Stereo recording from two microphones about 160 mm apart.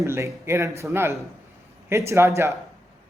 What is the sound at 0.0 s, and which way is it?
Speech, 20° right (ahead or behind).